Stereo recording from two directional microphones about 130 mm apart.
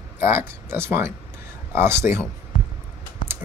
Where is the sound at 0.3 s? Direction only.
20° right (ahead or behind).